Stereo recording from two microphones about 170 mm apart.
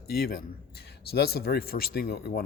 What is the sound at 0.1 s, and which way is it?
Speech, 65° left (ahead or behind).